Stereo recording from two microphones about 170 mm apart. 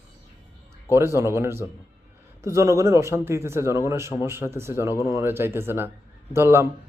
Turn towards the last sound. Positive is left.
turn(degrees=-15)  # may be behind; listen again after turning